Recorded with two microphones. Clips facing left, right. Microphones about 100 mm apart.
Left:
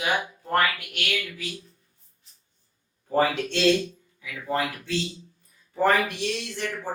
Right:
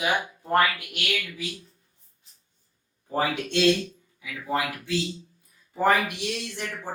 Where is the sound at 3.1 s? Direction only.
15° right (ahead or behind).